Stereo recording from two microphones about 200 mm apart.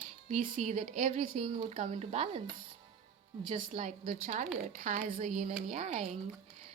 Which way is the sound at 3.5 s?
30° right (ahead or behind).